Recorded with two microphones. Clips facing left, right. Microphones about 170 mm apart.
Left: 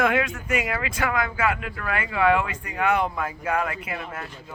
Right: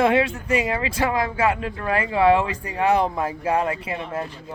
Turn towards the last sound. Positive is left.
turn(degrees=-30)  # may be behind; listen again after turning